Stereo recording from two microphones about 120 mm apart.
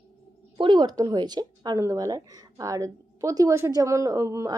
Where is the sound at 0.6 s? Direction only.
40° right (ahead or behind).